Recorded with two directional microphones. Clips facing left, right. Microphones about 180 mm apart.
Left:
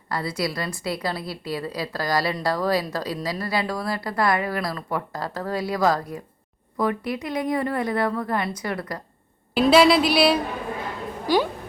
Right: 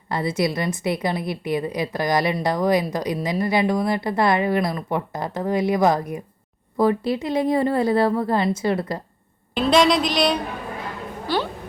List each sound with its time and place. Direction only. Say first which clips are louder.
0.1 s a woman's voice: right 4 dB; 20° right (ahead or behind)
9.6 s a woman's voice: left 2 dB; 5° left (ahead or behind)